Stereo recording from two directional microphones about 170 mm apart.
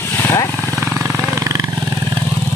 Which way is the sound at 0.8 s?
15° right (ahead or behind).